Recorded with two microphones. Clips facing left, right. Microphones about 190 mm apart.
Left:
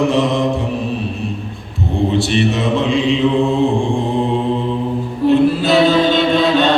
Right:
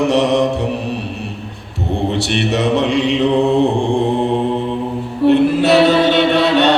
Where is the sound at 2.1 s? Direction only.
70° right (ahead or behind).